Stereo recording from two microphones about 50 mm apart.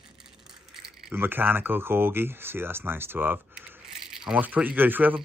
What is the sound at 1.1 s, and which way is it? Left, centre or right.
Speech, right.